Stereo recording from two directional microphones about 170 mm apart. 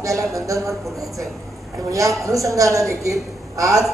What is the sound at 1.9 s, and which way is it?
A woman's voice, 20° right (ahead or behind).